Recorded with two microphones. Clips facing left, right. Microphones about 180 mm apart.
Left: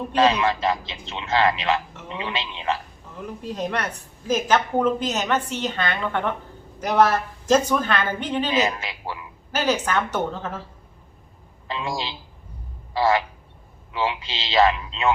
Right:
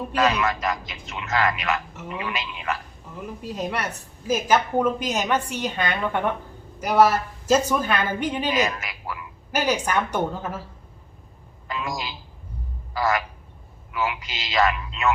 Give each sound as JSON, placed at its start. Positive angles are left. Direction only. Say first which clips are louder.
{"t": 0.2, "sound": "a man's voice", "louder": "left 3 dB", "side_deg": 25}
{"t": 3.4, "sound": "a woman's voice", "louder": "left 1 dB", "side_deg": -10}
{"t": 8.5, "sound": "a man's voice", "louder": "left 1 dB", "side_deg": 25}
{"t": 9.5, "sound": "a woman's voice", "louder": "left 1 dB", "side_deg": -10}
{"t": 11.7, "sound": "a man's voice", "louder": "left 2 dB", "side_deg": 25}